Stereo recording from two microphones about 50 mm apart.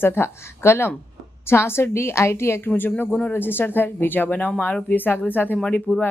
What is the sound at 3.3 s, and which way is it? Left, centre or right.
A woman's voice, left.